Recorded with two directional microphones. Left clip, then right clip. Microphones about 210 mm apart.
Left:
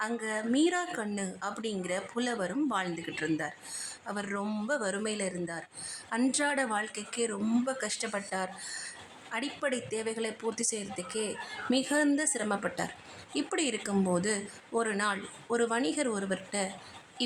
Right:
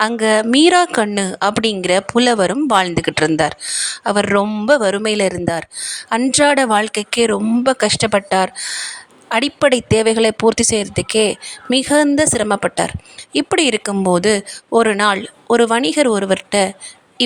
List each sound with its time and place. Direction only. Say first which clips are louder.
0.0 s a woman's voice: right 19 dB; 40° right (ahead or behind)